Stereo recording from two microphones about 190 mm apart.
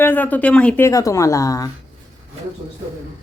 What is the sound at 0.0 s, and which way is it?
Speech, 10° left (ahead or behind).